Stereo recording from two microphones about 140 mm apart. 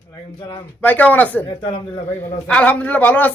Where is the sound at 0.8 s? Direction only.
10° left (ahead or behind).